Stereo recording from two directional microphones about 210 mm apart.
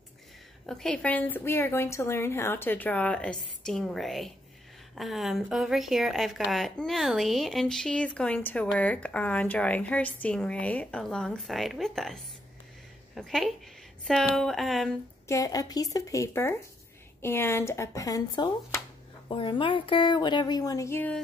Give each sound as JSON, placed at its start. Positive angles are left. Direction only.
{"t": 0.7, "sound": "a woman's voice", "side_deg": 0}
{"t": 15.2, "sound": "a woman's voice", "side_deg": 15}